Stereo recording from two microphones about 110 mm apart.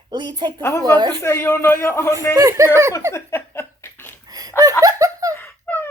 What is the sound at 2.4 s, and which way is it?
Speech, 30° right (ahead or behind).